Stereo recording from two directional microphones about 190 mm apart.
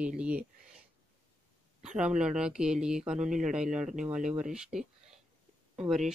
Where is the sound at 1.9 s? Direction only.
5° right (ahead or behind).